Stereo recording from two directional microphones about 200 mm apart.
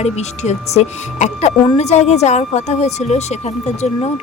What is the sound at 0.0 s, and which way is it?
A woman's voice, 35° left (ahead or behind).